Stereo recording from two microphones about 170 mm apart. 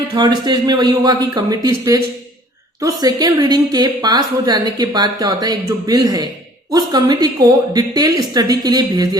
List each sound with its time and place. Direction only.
0.1 s a woman's voice: 25° right (ahead or behind)